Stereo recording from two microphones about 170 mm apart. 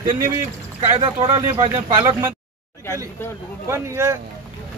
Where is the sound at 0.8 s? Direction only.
30° right (ahead or behind).